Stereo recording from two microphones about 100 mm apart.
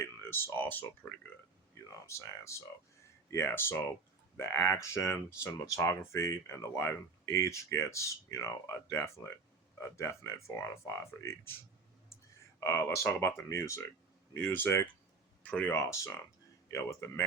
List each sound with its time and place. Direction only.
0.0 s speech: 25° left (ahead or behind)
2.0 s speech: 30° left (ahead or behind); by 15.7 s 15° left (ahead or behind)
15.7 s speech: 30° left (ahead or behind)